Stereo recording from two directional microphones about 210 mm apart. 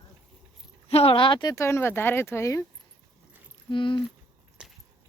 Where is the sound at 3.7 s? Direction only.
25° left (ahead or behind).